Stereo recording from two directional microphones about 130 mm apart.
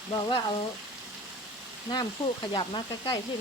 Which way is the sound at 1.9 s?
35° left (ahead or behind).